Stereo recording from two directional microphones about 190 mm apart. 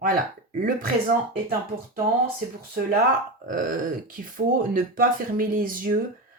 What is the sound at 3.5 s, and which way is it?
Speech, 45° right (ahead or behind).